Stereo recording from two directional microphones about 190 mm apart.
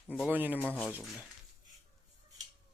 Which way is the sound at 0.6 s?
5° left (ahead or behind).